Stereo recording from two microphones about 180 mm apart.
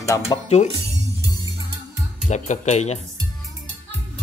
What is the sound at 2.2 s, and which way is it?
Speech, 40° left (ahead or behind).